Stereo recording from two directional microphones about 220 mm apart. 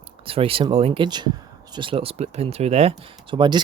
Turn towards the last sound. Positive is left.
turn(degrees=-20)  # may be behind; listen again after turning